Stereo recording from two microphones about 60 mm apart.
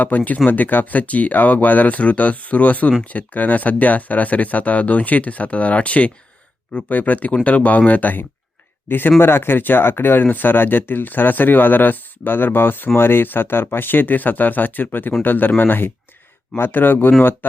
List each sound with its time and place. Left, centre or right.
0.1 s speech: left